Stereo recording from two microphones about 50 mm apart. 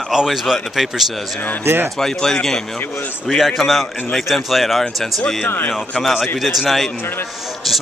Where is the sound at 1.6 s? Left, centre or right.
Right.